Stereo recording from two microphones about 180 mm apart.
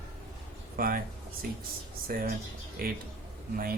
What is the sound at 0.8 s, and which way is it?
Speech, 55° right (ahead or behind).